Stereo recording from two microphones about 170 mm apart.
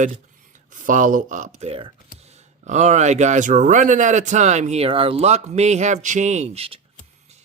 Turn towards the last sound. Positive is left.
turn(degrees=-35)  # may be behind; listen again after turning